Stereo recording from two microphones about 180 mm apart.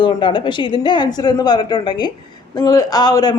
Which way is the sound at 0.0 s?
25° left (ahead or behind).